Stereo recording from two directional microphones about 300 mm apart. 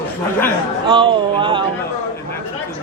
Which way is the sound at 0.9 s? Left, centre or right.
Centre.